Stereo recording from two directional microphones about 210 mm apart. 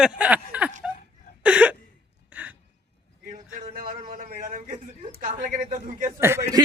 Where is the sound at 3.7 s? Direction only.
40° right (ahead or behind).